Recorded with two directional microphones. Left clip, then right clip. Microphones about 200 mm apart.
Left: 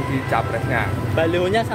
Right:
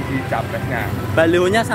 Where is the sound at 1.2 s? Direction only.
30° right (ahead or behind).